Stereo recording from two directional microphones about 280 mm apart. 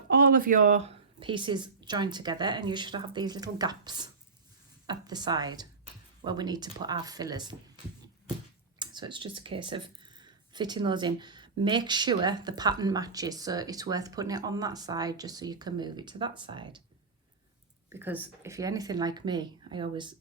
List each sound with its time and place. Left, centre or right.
0.1 s speech: right; by 7.5 s centre
8.8 s speech: centre
17.8 s speech: centre